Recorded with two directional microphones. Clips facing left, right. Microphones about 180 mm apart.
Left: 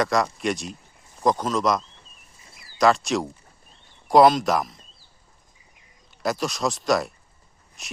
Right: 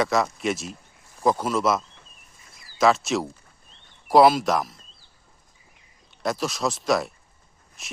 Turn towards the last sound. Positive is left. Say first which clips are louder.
# left 1 dB
turn(degrees=0)  # may be behind; listen again after turning